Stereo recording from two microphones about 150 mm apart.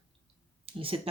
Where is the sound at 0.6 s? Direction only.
40° right (ahead or behind).